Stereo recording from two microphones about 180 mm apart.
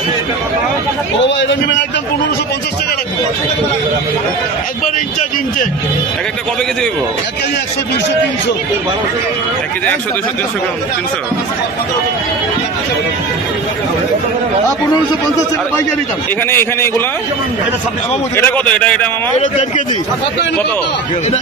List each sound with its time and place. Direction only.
1.2 s a man's voice: 85° left
16.4 s a man's voice: 15° left (ahead or behind)
18.3 s a man's voice: 10° left (ahead or behind)